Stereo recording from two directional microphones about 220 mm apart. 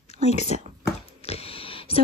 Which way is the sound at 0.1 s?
30° left (ahead or behind).